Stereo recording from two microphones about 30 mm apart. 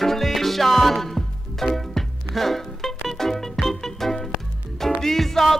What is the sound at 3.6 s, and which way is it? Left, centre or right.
Music, centre.